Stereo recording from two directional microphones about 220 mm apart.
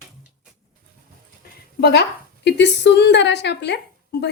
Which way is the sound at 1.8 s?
50° left (ahead or behind).